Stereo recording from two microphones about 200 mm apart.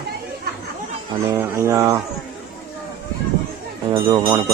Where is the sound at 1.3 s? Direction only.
15° right (ahead or behind).